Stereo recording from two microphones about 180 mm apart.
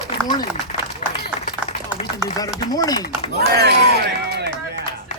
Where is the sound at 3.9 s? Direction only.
65° right (ahead or behind).